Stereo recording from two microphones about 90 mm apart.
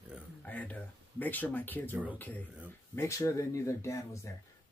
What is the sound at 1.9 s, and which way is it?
Speech, 20° right (ahead or behind).